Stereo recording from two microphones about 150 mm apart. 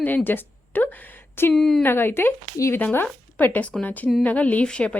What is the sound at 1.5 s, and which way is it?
Speech, 5° left (ahead or behind).